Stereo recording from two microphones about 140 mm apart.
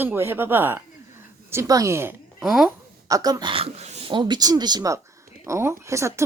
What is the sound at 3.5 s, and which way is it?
Speech, 40° right (ahead or behind).